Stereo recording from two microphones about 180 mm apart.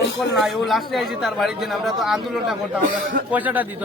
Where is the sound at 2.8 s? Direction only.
50° right (ahead or behind).